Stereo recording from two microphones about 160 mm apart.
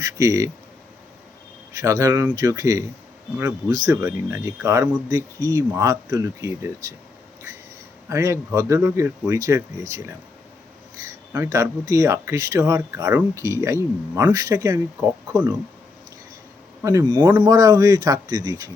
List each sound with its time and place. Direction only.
0.0 s speech: 20° right (ahead or behind)
1.8 s speech: 20° right (ahead or behind)
8.1 s speech: 20° right (ahead or behind)
11.5 s speech: 20° right (ahead or behind)
16.8 s speech: 20° right (ahead or behind)